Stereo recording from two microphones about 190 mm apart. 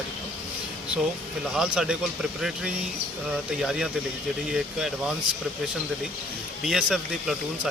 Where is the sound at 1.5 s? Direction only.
5° right (ahead or behind).